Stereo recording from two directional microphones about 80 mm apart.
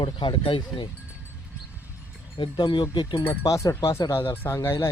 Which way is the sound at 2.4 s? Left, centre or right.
Left.